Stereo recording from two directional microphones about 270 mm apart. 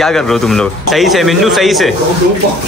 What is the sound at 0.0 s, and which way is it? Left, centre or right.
Speech, centre.